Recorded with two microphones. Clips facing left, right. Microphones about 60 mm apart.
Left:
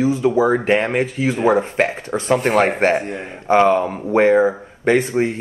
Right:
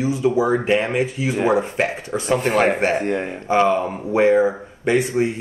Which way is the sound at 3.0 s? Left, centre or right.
Right.